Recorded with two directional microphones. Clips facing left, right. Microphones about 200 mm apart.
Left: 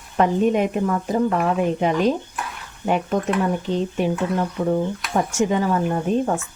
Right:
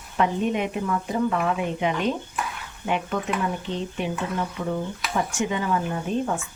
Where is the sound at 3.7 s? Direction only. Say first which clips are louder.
Left 7 dB; 45° left (ahead or behind).